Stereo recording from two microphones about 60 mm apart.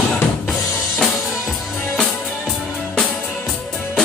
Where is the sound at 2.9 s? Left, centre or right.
Centre.